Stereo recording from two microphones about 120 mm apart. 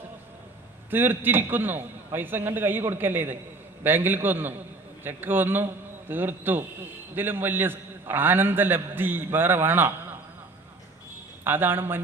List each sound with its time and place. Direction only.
0.9 s a man's voice: 15° right (ahead or behind)
11.4 s a man's voice: 15° right (ahead or behind)